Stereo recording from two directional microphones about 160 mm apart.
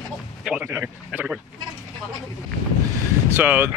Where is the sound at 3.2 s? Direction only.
15° right (ahead or behind).